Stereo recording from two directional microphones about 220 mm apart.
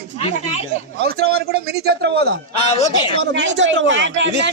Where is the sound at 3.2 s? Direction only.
55° right (ahead or behind).